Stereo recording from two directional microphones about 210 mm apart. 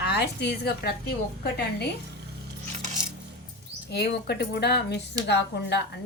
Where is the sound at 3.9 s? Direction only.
50° left (ahead or behind).